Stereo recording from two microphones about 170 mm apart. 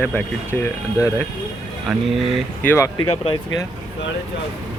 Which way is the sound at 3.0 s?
30° left (ahead or behind).